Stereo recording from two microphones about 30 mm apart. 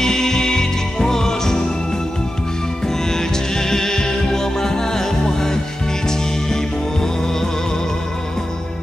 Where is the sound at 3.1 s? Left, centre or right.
Centre.